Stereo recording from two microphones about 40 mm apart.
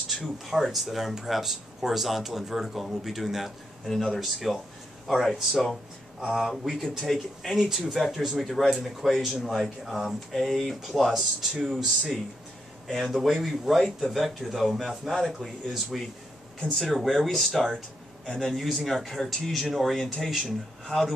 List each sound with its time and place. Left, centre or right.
0.5 s speech: centre
3.8 s speech: centre
12.8 s a man's voice: centre
13.1 s speech: centre
16.7 s speech: centre
18.2 s a man's voice: centre
18.5 s speech: centre